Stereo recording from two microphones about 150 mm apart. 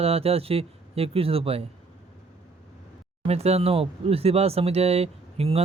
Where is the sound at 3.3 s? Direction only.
45° right (ahead or behind).